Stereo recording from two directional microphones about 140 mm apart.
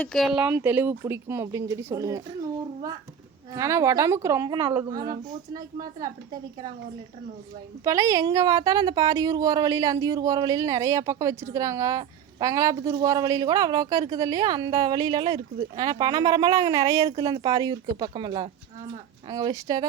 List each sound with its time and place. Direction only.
0.0 s speech: 5° left (ahead or behind); by 2.2 s 20° right (ahead or behind)
3.5 s speech: 20° right (ahead or behind)
7.9 s speech: 25° right (ahead or behind)